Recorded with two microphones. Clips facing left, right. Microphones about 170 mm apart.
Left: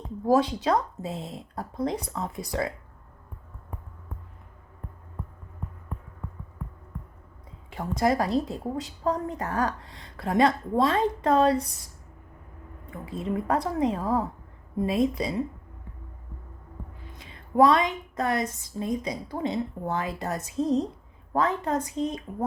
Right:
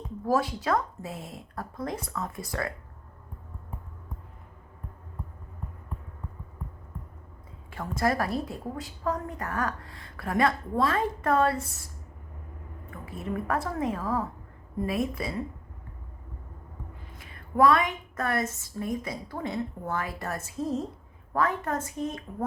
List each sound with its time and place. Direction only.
0.3 s a woman's voice: 20° left (ahead or behind)
7.7 s a woman's voice: 20° left (ahead or behind)
12.9 s a woman's voice: 25° left (ahead or behind)
17.2 s a sound: 20° left (ahead or behind)
18.6 s a woman's voice: 20° left (ahead or behind)